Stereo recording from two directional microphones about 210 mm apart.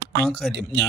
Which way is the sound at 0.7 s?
55° right (ahead or behind).